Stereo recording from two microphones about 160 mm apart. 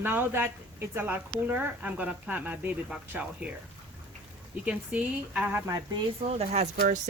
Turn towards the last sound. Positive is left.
turn(degrees=-50)  # may be behind; listen again after turning